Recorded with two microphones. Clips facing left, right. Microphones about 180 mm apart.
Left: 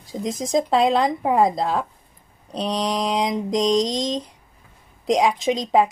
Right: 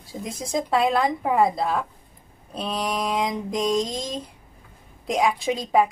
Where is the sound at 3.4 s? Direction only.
90° left.